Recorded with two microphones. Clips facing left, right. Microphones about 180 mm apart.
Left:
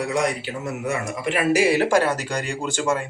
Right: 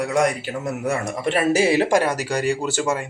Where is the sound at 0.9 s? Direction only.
35° right (ahead or behind); by 3.0 s 10° right (ahead or behind).